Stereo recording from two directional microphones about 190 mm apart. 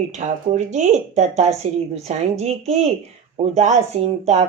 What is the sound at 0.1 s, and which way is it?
Speech, 40° right (ahead or behind).